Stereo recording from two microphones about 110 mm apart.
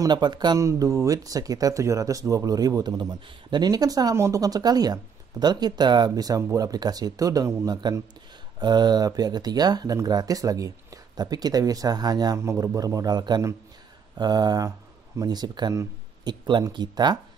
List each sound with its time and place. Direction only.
0.0 s speech: 40° right (ahead or behind)
0.6 s speech: 30° right (ahead or behind)
12.4 s speech: 25° right (ahead or behind)